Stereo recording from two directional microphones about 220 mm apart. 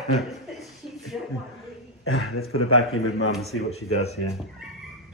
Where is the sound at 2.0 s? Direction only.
70° left (ahead or behind).